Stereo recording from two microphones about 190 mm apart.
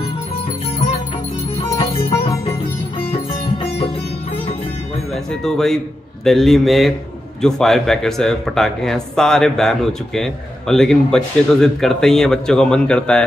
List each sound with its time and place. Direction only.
1.8 s music: 30° left (ahead or behind)
5.1 s speech: centre (ahead or behind)